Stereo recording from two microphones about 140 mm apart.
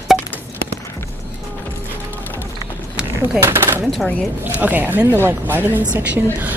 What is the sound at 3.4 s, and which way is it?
Speech, 15° right (ahead or behind).